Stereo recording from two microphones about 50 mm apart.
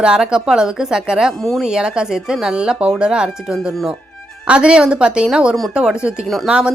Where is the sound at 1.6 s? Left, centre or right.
Centre.